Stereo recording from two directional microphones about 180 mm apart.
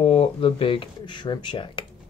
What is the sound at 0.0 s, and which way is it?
Speech, 35° left (ahead or behind).